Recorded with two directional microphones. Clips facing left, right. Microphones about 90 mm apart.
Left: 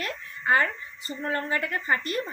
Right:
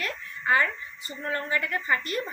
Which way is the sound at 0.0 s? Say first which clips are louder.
Even; 35° left (ahead or behind).